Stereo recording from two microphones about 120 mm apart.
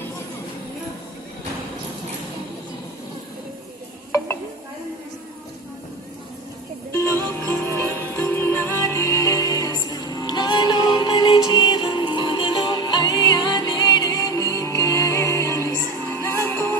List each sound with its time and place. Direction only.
6.9 s music: 20° left (ahead or behind)